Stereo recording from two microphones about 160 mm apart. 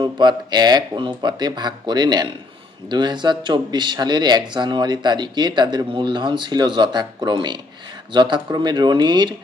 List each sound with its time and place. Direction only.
0.0 s speech: 25° right (ahead or behind)